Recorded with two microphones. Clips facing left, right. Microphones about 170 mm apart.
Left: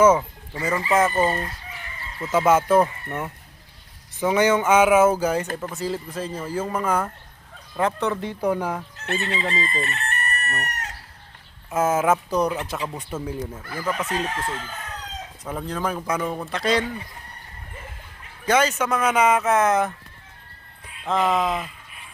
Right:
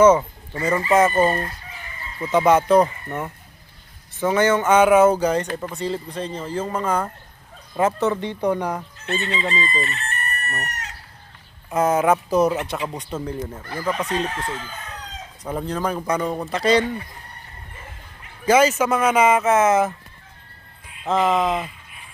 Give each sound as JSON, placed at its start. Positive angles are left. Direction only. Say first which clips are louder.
{"t": 0.0, "sound": "speech", "louder": "right 3 dB", "side_deg": 10}
{"t": 1.1, "sound": "chicken", "louder": "right 3 dB", "side_deg": -15}
{"t": 2.3, "sound": "speech", "louder": "right 2 dB", "side_deg": 5}
{"t": 7.8, "sound": "speech", "louder": "right 3 dB", "side_deg": -5}
{"t": 9.0, "sound": "fowl", "louder": "even", "side_deg": 65}
{"t": 9.5, "sound": "chicken", "louder": "right 2 dB", "side_deg": 60}
{"t": 11.7, "sound": "speech", "louder": "right 2 dB", "side_deg": 5}
{"t": 15.4, "sound": "speech", "louder": "right 3 dB", "side_deg": 0}
{"t": 18.4, "sound": "speech", "louder": "right 4 dB", "side_deg": -5}
{"t": 21.0, "sound": "speech", "louder": "right 2 dB", "side_deg": 0}